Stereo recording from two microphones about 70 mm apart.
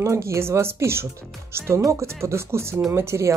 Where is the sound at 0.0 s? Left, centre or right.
Right.